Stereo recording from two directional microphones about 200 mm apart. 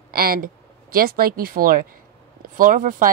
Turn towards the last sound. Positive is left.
turn(degrees=-40)  # may be behind; listen again after turning